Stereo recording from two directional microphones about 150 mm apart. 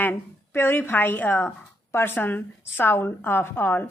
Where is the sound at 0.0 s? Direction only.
15° left (ahead or behind).